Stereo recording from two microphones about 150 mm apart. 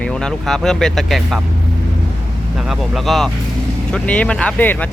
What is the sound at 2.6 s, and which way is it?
Speech, centre (ahead or behind).